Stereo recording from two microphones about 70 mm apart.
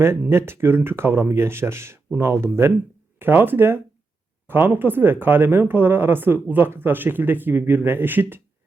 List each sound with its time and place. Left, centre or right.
0.3 s speech: right